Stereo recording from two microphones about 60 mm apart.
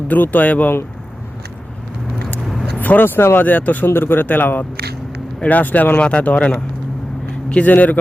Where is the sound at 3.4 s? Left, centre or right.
Left.